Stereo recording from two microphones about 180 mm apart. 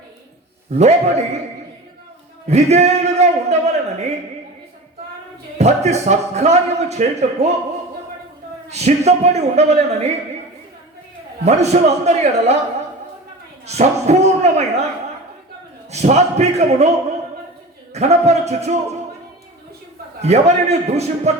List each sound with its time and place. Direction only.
0.8 s speech: 40° right (ahead or behind)
2.5 s a man's voice: 35° right (ahead or behind)
5.5 s speech: 40° right (ahead or behind)
8.7 s speech: 35° right (ahead or behind)
11.4 s speech: 35° right (ahead or behind)
13.7 s speech: 35° right (ahead or behind)
15.9 s speech: 40° right (ahead or behind)
17.9 s speech: 35° right (ahead or behind)
20.2 s speech: 35° right (ahead or behind)